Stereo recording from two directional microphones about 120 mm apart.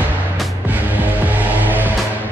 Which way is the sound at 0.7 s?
15° right (ahead or behind).